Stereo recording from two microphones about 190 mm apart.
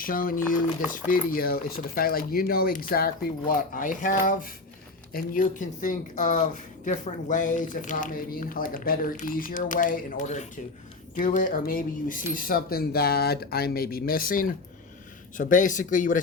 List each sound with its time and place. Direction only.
0.0 s speech: 50° left (ahead or behind)